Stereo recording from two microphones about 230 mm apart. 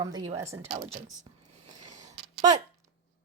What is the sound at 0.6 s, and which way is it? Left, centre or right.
Speech, right.